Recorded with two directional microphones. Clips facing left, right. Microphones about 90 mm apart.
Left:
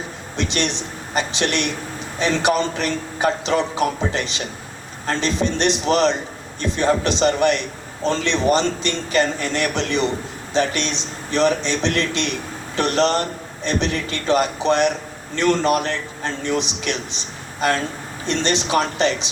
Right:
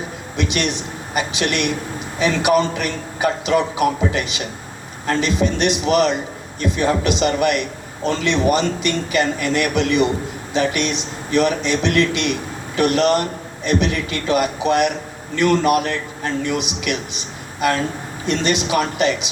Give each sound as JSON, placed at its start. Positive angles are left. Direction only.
{"t": 0.3, "sound": "a man's voice", "side_deg": 30}